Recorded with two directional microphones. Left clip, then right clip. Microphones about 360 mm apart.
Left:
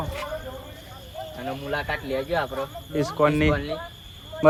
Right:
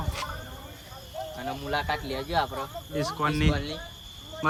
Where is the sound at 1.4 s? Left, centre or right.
Centre.